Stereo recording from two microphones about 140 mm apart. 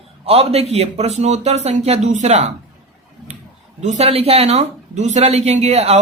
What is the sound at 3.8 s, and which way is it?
Speech, 50° right (ahead or behind).